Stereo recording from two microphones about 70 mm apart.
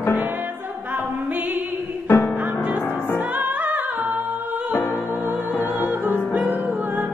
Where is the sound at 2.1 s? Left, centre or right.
Left.